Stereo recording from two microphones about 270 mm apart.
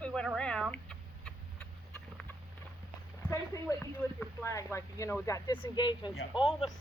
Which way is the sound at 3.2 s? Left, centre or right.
Centre.